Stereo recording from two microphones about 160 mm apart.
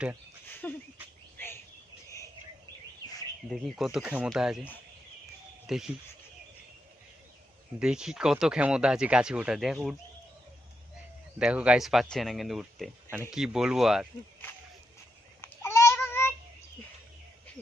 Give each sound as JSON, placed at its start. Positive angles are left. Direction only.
{"t": 0.6, "sound": "bird", "side_deg": 10}
{"t": 3.5, "sound": "speech", "side_deg": 0}
{"t": 5.6, "sound": "speech", "side_deg": 0}
{"t": 7.8, "sound": "speech", "side_deg": -5}
{"t": 11.3, "sound": "speech", "side_deg": -5}
{"t": 15.4, "sound": "babbling", "side_deg": 15}